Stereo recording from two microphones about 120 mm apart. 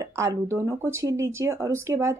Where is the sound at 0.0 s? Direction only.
25° right (ahead or behind).